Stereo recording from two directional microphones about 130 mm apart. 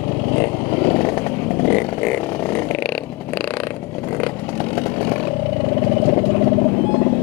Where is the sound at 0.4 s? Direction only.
15° left (ahead or behind).